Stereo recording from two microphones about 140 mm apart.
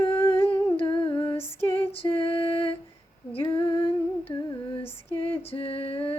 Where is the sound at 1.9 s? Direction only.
40° left (ahead or behind).